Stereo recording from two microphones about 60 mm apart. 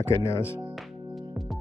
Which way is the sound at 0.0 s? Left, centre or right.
Left.